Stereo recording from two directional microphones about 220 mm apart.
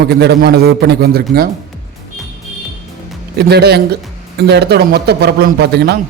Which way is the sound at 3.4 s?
45° right (ahead or behind).